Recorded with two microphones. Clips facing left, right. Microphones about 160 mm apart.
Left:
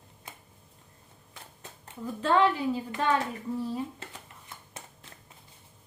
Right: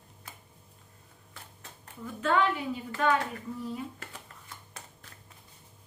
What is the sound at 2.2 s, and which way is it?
Speech, 30° left (ahead or behind).